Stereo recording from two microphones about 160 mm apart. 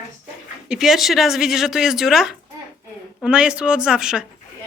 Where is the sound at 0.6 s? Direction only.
5° right (ahead or behind).